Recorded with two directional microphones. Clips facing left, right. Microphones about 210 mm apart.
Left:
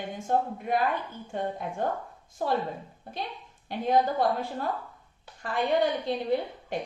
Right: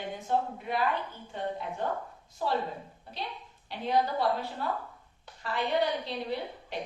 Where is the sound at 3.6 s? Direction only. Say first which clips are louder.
Left 4 dB; 50° left (ahead or behind).